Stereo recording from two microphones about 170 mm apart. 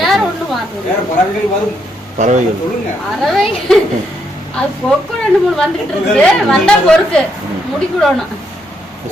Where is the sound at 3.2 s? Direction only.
Centre (ahead or behind).